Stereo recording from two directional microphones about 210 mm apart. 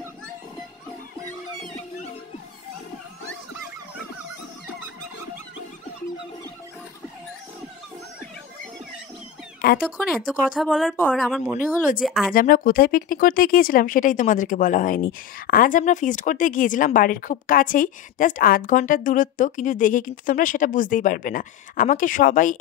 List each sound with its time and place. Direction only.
9.6 s speech: 45° left (ahead or behind)
10.0 s speech: centre (ahead or behind)
11.5 s speech: 40° left (ahead or behind)
12.0 s speech: centre (ahead or behind)
12.3 s speech: 40° left (ahead or behind)